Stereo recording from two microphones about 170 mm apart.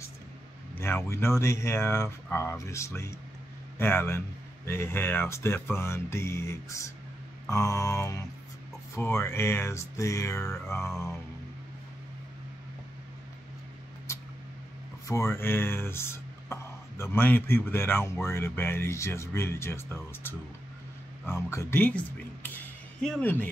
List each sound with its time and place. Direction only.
0.7 s a man's voice: 15° left (ahead or behind)
7.4 s mantra: 20° left (ahead or behind)
8.9 s speech: 15° left (ahead or behind)
15.0 s speech: 15° left (ahead or behind)